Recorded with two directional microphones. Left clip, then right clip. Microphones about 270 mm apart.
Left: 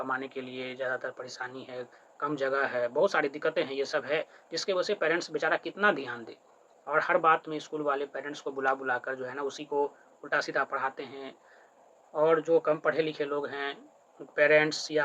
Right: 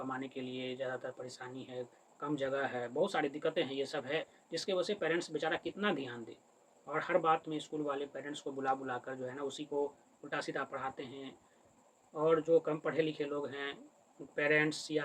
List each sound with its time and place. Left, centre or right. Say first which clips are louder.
0.1 s speech: left 7 dB; centre